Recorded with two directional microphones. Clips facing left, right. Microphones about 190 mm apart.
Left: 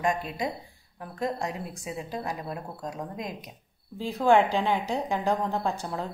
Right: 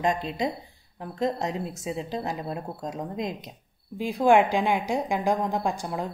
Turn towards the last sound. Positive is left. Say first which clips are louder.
# right 2 dB
turn(degrees=-15)  # may be behind; listen again after turning